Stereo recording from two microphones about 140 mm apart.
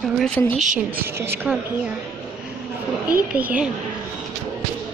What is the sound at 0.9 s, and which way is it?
Speech, 15° right (ahead or behind).